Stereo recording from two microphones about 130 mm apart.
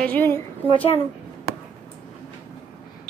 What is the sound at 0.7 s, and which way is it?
Speech, 45° left (ahead or behind).